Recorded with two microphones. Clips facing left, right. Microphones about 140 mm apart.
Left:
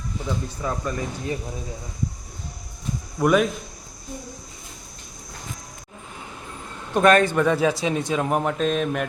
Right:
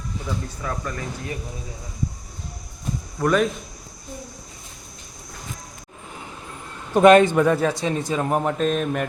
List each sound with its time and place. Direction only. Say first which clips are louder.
0.6 s speech: left 4 dB; 20° left (ahead or behind)
3.2 s speech: left 1 dB; 5° left (ahead or behind)
7.0 s a man's voice: right 4 dB; 20° right (ahead or behind)
7.3 s speech: right 1 dB; centre (ahead or behind)